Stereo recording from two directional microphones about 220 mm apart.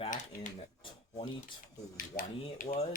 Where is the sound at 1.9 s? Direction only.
40° left (ahead or behind).